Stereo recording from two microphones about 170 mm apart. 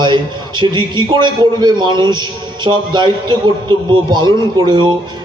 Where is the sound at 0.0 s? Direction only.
25° right (ahead or behind).